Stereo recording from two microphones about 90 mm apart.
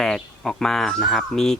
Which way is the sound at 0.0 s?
5° left (ahead or behind).